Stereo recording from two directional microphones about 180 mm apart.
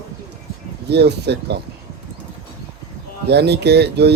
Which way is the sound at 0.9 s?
70° right (ahead or behind).